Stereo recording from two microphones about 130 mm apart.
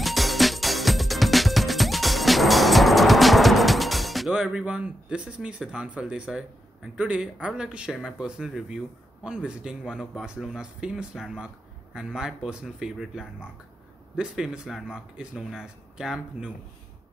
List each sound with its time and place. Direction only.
0.0 s music: centre (ahead or behind)
7.0 s speech: 10° right (ahead or behind)